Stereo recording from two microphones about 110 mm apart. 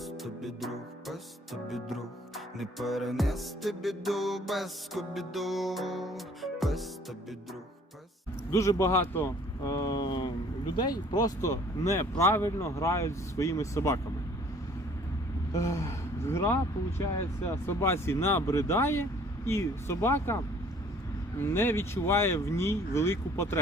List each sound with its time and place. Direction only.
0.0 s music: centre (ahead or behind)
8.4 s speech: 30° left (ahead or behind)
9.7 s a sound: 35° left (ahead or behind)
10.8 s speech: 35° left (ahead or behind)
15.5 s speech: 30° left (ahead or behind)